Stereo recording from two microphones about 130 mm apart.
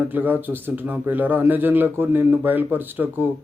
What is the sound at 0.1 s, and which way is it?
A man's voice, 15° right (ahead or behind).